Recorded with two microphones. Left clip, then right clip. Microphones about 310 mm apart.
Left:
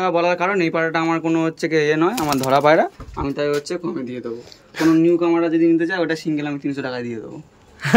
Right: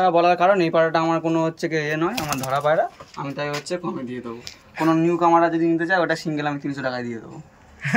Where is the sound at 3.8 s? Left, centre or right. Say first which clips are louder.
Left 3 dB; centre.